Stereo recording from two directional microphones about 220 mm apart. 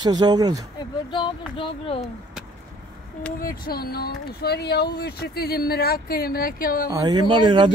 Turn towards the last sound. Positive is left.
turn(degrees=-20)  # may be behind; listen again after turning